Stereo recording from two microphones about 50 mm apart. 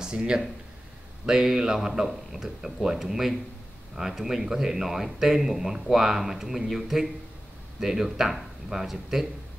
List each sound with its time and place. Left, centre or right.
0.0 s speech: centre